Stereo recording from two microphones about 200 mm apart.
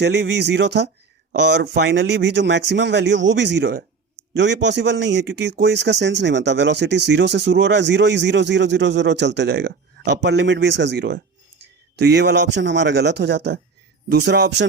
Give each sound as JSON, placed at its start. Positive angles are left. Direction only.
{"t": 0.0, "sound": "speech", "side_deg": -60}